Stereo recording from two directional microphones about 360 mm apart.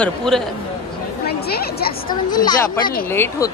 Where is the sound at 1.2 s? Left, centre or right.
Left.